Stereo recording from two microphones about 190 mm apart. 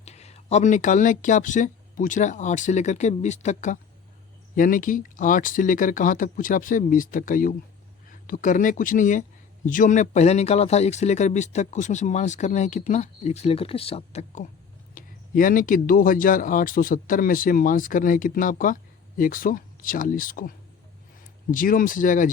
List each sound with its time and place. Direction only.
0.0 s speech: 35° left (ahead or behind)
14.9 s speech: 45° left (ahead or behind)
21.5 s speech: 45° left (ahead or behind)